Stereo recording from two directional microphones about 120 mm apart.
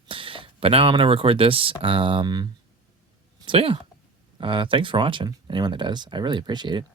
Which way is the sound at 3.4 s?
50° right (ahead or behind).